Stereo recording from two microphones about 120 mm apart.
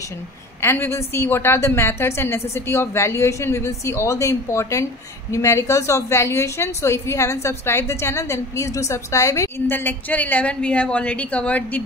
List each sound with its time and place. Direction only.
0.6 s a woman's voice: 20° left (ahead or behind)